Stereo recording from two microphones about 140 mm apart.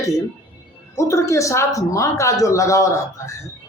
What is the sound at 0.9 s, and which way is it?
Speech, 20° left (ahead or behind).